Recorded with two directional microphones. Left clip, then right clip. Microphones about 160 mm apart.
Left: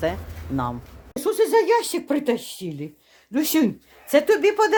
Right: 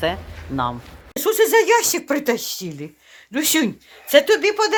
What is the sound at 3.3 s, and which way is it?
Speech, 15° left (ahead or behind).